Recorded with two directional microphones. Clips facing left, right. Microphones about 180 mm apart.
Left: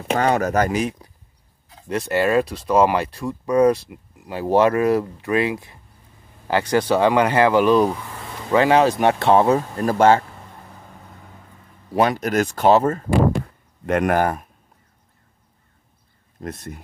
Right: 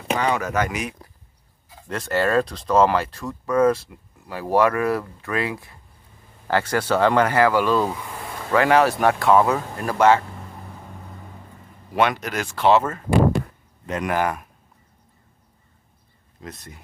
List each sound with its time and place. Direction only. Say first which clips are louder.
0.1 s speech: left 4 dB; 45° left (ahead or behind)
1.9 s speech: left 2 dB; 15° left (ahead or behind); by 9.9 s 30° left (ahead or behind)
11.9 s speech: left 2 dB; 30° left (ahead or behind)
12.2 s speech: left 5 dB; 45° left (ahead or behind)
13.8 s speech: left 5 dB; 60° left (ahead or behind)
16.3 s speech: left 7 dB; 55° left (ahead or behind)